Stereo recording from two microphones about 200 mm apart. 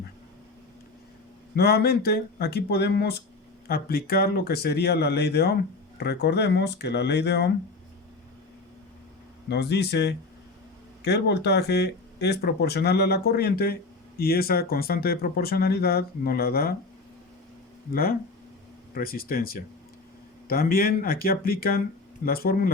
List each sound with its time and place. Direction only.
1.5 s speech: 50° left (ahead or behind)
9.5 s speech: 55° left (ahead or behind)
17.9 s speech: 50° left (ahead or behind)